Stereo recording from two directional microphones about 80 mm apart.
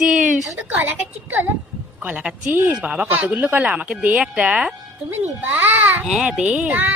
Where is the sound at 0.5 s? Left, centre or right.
Right.